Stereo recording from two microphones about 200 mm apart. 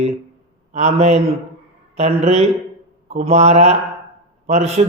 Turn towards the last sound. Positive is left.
turn(degrees=-35)  # may be behind; listen again after turning